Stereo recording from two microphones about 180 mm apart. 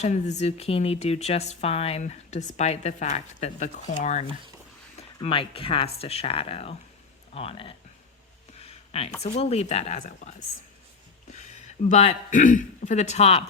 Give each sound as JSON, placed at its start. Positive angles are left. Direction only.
{"t": 0.0, "sound": "a man's voice", "side_deg": 40}